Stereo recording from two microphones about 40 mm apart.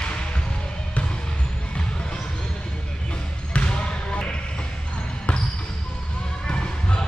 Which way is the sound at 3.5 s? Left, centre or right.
Left.